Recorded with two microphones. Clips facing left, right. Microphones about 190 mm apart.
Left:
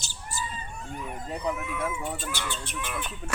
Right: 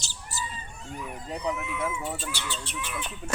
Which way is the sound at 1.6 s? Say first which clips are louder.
Even; 55° left (ahead or behind).